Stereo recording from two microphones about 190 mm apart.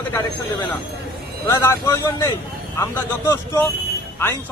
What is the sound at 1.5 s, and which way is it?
Speech, 15° left (ahead or behind).